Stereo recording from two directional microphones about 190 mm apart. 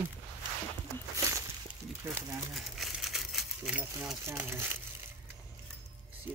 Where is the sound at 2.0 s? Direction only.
5° right (ahead or behind).